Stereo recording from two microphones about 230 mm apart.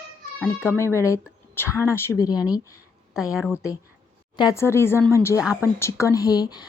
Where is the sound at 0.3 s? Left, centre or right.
Centre.